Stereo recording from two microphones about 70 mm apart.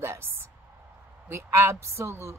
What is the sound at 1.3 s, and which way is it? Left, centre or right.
Speech, right.